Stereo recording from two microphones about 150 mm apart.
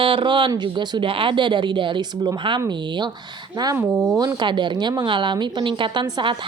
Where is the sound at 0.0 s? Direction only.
35° right (ahead or behind).